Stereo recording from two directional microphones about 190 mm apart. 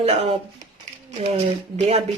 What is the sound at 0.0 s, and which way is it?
Speech, 35° right (ahead or behind).